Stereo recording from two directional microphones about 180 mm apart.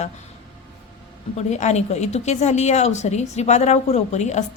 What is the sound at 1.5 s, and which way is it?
A woman's voice, 40° left (ahead or behind).